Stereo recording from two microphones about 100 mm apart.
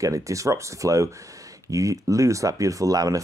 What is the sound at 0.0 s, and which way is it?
Speech, 35° right (ahead or behind).